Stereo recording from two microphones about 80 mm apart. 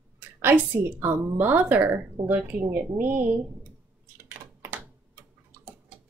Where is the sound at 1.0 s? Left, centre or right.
Right.